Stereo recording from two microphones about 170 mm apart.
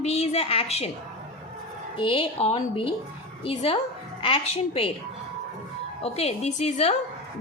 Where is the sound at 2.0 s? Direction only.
30° left (ahead or behind).